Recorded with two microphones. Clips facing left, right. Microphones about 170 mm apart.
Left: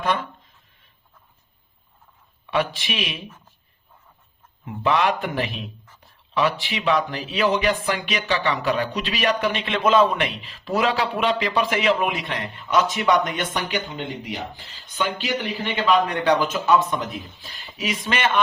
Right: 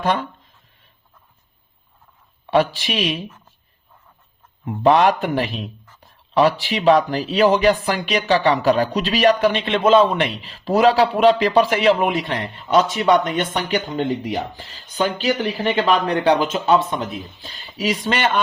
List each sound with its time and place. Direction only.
0.0 s speech: 35° right (ahead or behind)
2.5 s speech: 35° right (ahead or behind)
4.6 s speech: 35° right (ahead or behind)
14.0 s speech: 45° right (ahead or behind)